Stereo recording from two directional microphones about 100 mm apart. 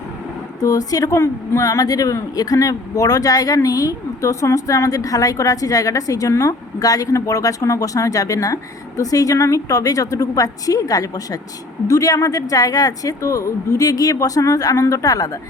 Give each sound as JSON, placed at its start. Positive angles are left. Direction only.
{"t": 0.6, "sound": "a woman's voice", "side_deg": 35}